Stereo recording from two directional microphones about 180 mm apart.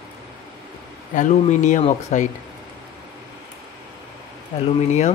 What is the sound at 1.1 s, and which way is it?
Speech, 45° left (ahead or behind).